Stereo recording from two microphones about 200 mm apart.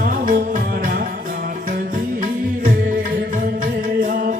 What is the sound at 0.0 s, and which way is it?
Music, 40° right (ahead or behind).